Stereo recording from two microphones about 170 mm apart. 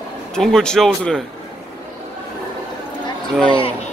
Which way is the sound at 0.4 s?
5° left (ahead or behind).